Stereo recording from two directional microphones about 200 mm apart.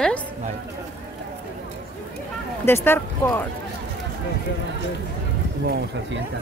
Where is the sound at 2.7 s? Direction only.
10° left (ahead or behind).